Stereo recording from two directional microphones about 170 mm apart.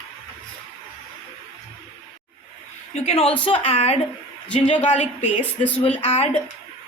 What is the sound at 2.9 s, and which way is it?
A woman's voice, 35° left (ahead or behind).